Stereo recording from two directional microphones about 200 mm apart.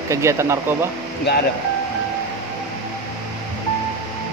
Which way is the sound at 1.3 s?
60° left (ahead or behind).